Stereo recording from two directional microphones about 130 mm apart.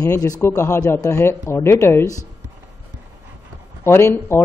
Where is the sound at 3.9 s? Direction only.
20° left (ahead or behind).